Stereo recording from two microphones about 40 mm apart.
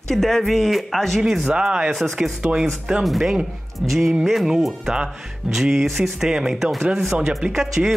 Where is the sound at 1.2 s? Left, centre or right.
Centre; by 2.6 s right.